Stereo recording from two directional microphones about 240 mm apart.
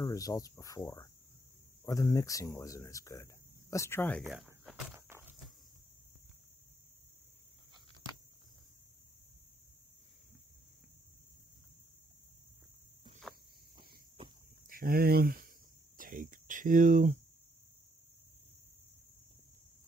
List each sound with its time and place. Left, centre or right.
0.0 s speech: centre
4.2 s cricket: centre
13.3 s a sound: centre
13.7 s cricket: centre
14.7 s speech: right